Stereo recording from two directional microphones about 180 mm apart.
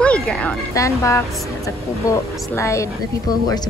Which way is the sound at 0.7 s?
15° left (ahead or behind).